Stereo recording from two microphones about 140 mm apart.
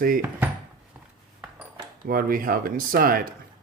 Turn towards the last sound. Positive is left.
turn(degrees=-90)